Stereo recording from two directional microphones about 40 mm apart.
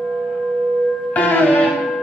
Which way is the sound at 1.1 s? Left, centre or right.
Left.